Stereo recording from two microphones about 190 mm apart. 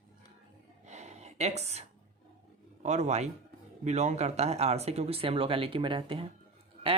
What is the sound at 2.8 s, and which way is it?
Speech, 40° right (ahead or behind).